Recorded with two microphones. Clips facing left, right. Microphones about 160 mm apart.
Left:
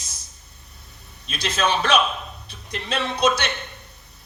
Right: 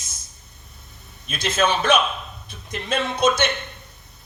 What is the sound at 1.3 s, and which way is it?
A man's voice, 50° right (ahead or behind).